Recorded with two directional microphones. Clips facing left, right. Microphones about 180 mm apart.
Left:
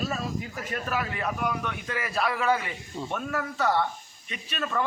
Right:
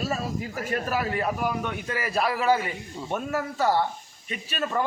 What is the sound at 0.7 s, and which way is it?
A man's voice, 35° right (ahead or behind).